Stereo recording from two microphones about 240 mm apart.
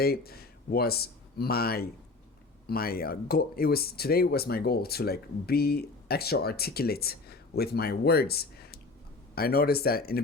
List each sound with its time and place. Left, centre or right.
0.0 s speech: left